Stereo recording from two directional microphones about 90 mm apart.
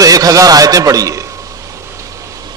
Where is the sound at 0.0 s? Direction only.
40° right (ahead or behind).